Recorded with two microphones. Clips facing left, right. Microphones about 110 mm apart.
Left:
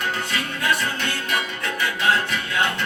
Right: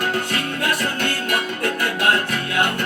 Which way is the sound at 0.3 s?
60° right (ahead or behind).